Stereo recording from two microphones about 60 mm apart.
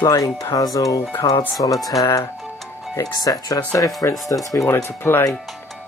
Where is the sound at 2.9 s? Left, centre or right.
Left.